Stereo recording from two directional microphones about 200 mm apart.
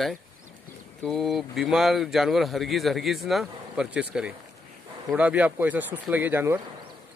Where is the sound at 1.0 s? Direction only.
Centre (ahead or behind).